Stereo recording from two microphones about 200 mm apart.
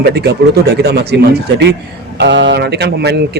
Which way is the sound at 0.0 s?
55° right (ahead or behind).